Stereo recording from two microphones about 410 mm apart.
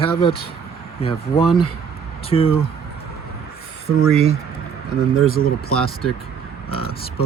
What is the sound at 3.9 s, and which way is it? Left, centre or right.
Speech, centre.